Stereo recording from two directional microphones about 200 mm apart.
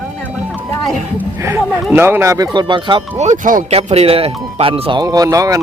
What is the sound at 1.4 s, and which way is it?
Speech, 15° right (ahead or behind).